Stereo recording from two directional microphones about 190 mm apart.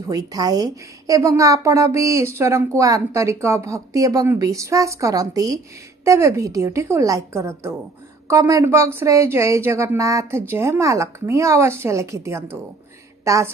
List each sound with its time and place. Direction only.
0.1 s a woman's voice: 20° right (ahead or behind)